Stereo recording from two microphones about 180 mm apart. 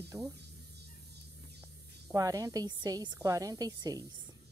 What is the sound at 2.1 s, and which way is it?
A woman's voice, 20° right (ahead or behind).